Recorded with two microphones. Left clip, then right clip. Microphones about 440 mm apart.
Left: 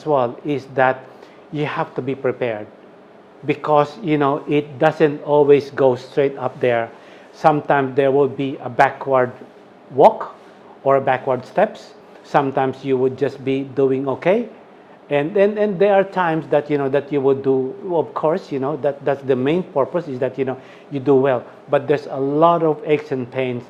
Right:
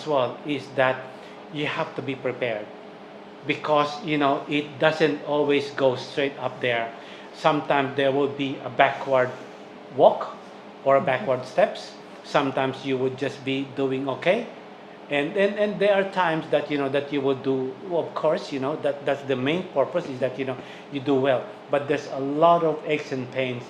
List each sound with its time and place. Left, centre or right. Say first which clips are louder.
0.1 s speech: left 6 dB; left
10.8 s speech: left 4 dB; left
12.3 s speech: left 6 dB; left